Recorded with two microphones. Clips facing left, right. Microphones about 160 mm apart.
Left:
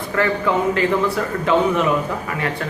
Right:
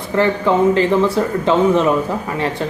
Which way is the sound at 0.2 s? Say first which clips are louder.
Right 5 dB; 30° right (ahead or behind).